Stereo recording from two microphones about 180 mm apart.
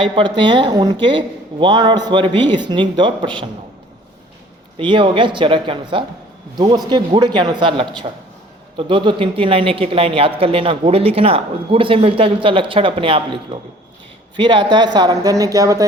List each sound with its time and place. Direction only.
0.3 s speech: 25° right (ahead or behind)
4.8 s speech: 25° right (ahead or behind)